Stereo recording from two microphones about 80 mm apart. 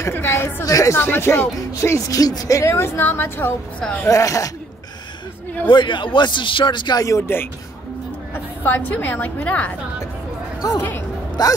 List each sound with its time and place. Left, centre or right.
0.0 s speech: left
0.7 s speech: left
0.9 s speech: left
3.0 s a woman's voice: left
4.1 s speech: left
5.7 s a man's voice: left
7.0 s speech: left
8.6 s a woman's voice: left
11.4 s a sound: left